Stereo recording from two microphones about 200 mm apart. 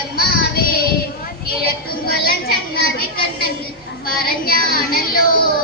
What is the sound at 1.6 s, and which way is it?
Child singing, 50° left (ahead or behind).